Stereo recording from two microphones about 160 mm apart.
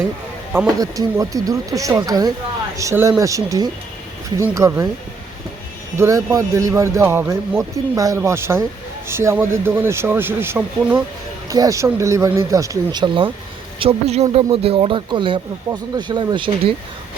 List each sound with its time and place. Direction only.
0.8 s speech: 20° right (ahead or behind)
6.0 s speech: 20° right (ahead or behind)